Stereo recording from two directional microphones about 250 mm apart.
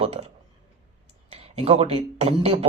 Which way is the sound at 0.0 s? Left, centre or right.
Right.